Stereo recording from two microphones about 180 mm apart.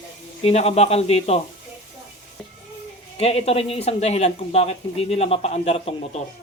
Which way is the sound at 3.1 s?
35° left (ahead or behind).